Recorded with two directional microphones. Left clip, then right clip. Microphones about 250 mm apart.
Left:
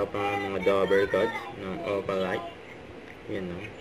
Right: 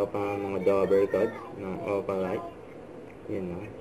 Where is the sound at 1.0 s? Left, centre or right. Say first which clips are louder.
Left 1 dB; centre.